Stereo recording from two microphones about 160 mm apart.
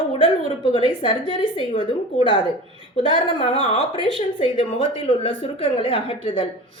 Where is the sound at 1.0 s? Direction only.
30° left (ahead or behind).